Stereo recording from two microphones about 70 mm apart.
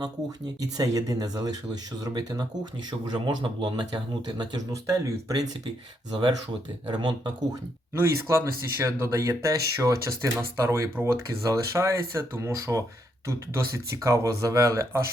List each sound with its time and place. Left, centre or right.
0.0 s speech: right
3.8 s speech: right
4.7 s speech: right
6.1 s speech: right
7.9 s speech: right